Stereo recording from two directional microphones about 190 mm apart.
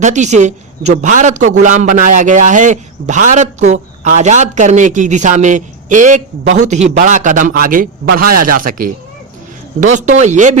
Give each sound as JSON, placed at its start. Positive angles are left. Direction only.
{"t": 0.0, "sound": "a man's voice", "side_deg": -40}